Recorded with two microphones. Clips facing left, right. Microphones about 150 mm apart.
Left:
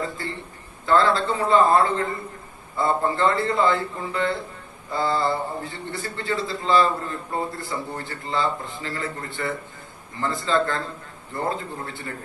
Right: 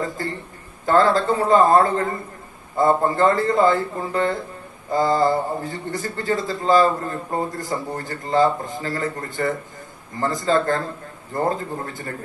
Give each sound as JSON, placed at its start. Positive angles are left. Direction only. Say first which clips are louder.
{"t": 0.8, "sound": "a man's voice", "louder": "right 3 dB", "side_deg": -40}